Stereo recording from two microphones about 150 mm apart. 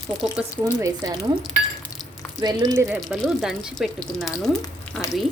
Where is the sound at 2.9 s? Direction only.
5° left (ahead or behind).